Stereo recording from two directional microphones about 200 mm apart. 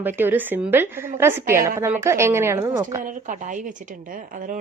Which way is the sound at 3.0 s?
40° right (ahead or behind).